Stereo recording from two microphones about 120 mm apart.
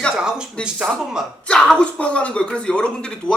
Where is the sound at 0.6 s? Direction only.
5° right (ahead or behind).